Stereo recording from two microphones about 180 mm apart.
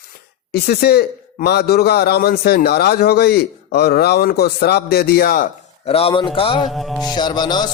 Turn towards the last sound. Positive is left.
turn(degrees=25)  # may be behind; listen again after turning